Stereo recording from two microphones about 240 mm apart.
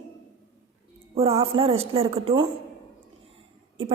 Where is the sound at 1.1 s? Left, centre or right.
Right.